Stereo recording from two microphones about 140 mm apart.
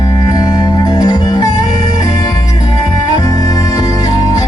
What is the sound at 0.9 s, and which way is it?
Music, 30° left (ahead or behind).